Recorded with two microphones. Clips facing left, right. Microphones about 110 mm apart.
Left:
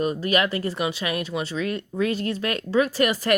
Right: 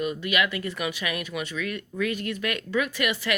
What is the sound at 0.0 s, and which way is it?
Speech, 40° left (ahead or behind).